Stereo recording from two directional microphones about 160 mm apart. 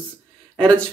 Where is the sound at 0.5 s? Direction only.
5° left (ahead or behind).